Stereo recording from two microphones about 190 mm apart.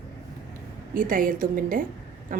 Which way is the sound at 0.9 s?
45° right (ahead or behind).